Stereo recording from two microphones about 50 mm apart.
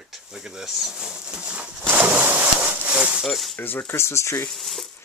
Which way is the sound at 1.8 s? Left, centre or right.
Right.